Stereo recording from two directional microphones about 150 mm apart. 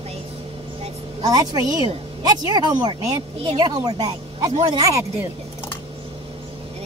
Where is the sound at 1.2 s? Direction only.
25° right (ahead or behind).